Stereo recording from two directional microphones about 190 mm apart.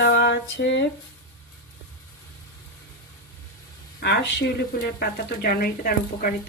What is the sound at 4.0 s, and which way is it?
A woman's voice, 60° left (ahead or behind).